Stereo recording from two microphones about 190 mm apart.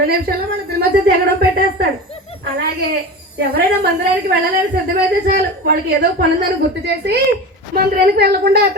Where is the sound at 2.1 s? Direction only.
30° left (ahead or behind).